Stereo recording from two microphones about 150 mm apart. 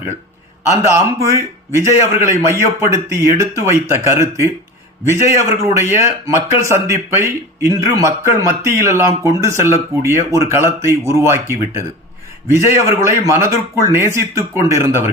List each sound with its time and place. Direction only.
0.7 s a man's voice: 20° right (ahead or behind)
2.3 s a man's voice: 20° right (ahead or behind)